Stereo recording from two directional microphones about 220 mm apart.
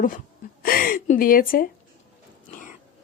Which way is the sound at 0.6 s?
40° left (ahead or behind).